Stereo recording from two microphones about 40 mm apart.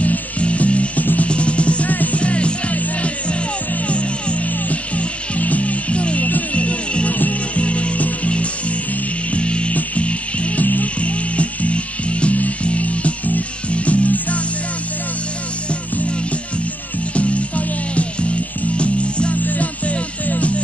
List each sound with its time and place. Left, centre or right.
0.0 s music: left
10.6 s music: left
11.0 s music: left
17.1 s music: left
19.3 s music: left